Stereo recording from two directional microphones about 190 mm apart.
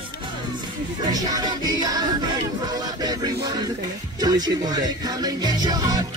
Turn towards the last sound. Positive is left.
turn(degrees=-20)  # may be behind; listen again after turning